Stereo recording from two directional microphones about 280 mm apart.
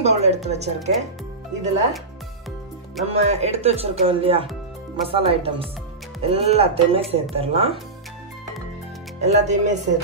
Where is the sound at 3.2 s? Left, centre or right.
Right.